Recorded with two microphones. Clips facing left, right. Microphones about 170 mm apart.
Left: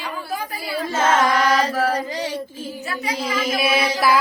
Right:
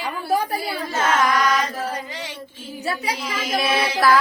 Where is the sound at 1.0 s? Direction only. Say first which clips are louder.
Left 2 dB; 25° left (ahead or behind).